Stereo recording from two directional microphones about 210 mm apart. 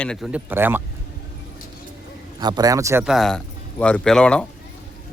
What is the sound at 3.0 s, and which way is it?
Speech, centre (ahead or behind).